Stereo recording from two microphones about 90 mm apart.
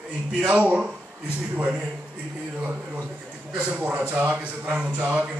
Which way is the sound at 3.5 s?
10° right (ahead or behind).